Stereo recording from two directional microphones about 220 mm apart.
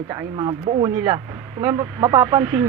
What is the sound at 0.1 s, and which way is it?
A man's voice, 20° right (ahead or behind).